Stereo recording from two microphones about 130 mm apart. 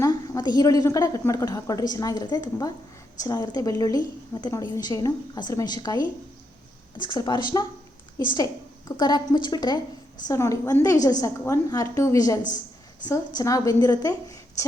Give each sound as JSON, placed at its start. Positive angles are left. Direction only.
{"t": 0.0, "sound": "a woman's voice", "side_deg": 30}
{"t": 9.0, "sound": "a woman's voice", "side_deg": 35}
{"t": 10.2, "sound": "a woman's voice", "side_deg": 25}